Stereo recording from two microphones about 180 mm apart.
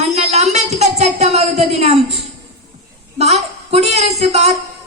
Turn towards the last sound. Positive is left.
turn(degrees=-35)  # may be behind; listen again after turning